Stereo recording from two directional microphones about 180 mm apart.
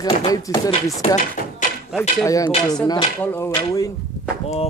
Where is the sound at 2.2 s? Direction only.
20° left (ahead or behind).